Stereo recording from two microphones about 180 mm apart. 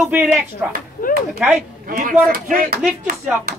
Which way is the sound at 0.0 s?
10° right (ahead or behind).